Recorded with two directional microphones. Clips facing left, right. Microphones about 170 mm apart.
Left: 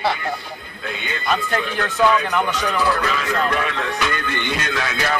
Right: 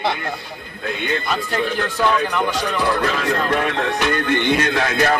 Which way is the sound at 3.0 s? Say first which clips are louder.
Right 2 dB; 45° right (ahead or behind).